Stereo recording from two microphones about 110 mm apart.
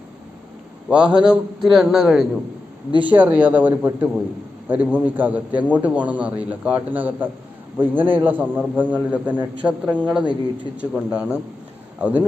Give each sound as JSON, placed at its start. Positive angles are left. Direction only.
{"t": 0.9, "sound": "a man's voice", "side_deg": -10}
{"t": 3.0, "sound": "a man's voice", "side_deg": -15}